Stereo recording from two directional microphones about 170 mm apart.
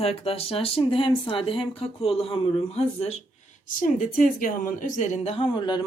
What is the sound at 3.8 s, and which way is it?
Speech, 50° left (ahead or behind).